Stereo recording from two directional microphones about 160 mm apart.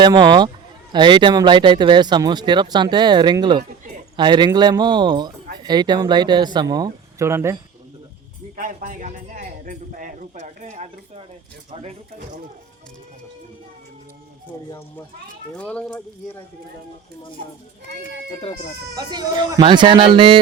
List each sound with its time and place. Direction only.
0.0 s speech: 30° right (ahead or behind)
8.5 s speech: 60° right (ahead or behind); by 11.9 s 40° right (ahead or behind)
15.5 s speech: 5° left (ahead or behind)
18.9 s speech: 25° right (ahead or behind)